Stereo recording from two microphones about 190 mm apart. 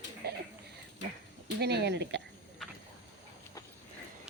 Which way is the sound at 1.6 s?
60° right (ahead or behind).